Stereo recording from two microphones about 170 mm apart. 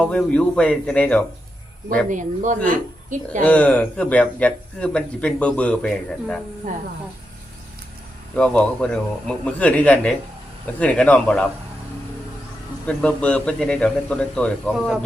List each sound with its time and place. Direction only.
0.0 s speech: 5° left (ahead or behind)
2.0 s speech: 50° right (ahead or behind)
3.4 s speech: 10° left (ahead or behind)
8.4 s speech: 5° left (ahead or behind)
12.9 s speech: 5° left (ahead or behind)